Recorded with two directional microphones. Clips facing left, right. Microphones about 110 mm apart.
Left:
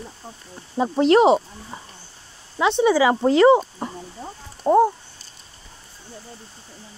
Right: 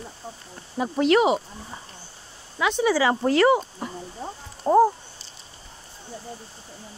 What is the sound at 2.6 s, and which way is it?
Speech, 25° left (ahead or behind).